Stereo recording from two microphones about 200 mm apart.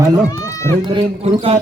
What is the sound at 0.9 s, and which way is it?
Speech, 25° right (ahead or behind).